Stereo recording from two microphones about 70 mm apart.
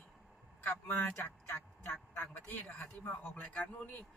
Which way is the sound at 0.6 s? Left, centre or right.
Left.